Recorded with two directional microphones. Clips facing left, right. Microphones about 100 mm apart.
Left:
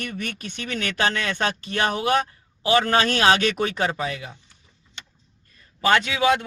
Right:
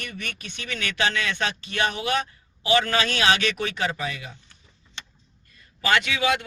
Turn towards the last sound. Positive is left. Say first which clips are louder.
# left 3 dB
turn(degrees=30)  # may be behind; listen again after turning